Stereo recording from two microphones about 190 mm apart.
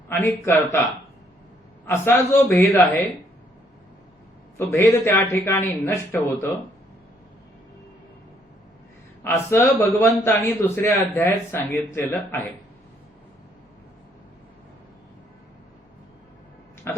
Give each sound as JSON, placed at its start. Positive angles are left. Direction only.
{"t": 0.1, "sound": "speech", "side_deg": 10}
{"t": 1.9, "sound": "speech", "side_deg": 10}
{"t": 4.5, "sound": "speech", "side_deg": 15}
{"t": 9.2, "sound": "speech", "side_deg": 10}